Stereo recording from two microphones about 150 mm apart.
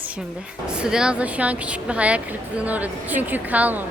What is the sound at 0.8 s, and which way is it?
A woman's voice, 5° right (ahead or behind).